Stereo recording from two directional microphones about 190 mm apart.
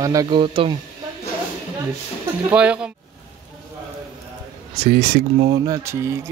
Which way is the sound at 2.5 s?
5° right (ahead or behind).